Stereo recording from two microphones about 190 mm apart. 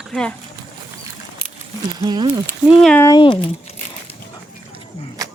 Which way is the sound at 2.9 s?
15° left (ahead or behind).